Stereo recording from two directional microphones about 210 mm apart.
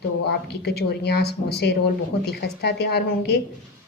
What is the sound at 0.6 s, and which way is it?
Speech, 50° left (ahead or behind).